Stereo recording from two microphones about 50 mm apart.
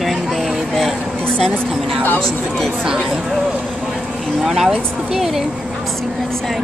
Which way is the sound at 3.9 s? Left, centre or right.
Centre.